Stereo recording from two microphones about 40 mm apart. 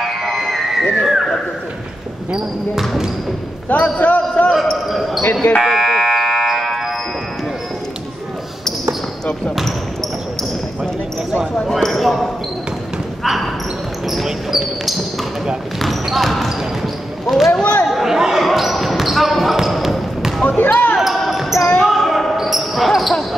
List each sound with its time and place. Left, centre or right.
0.0 s music: centre
1.0 s a sound: centre
3.6 s speech: left
4.6 s speech: centre
5.7 s fire alarm: centre
11.6 s speech: centre
13.2 s basketball bounce: centre
14.0 s speech: centre
15.8 s basketball bounce: centre
17.8 s chatter: centre
18.4 s basketball bounce: centre
20.4 s basketball bounce: left
21.0 s basketball bounce: centre